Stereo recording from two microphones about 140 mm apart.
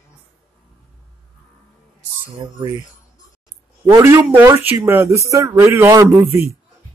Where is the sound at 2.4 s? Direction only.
30° right (ahead or behind).